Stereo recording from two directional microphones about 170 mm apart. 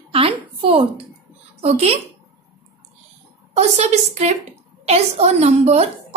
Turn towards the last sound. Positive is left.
turn(degrees=-40)  # may be behind; listen again after turning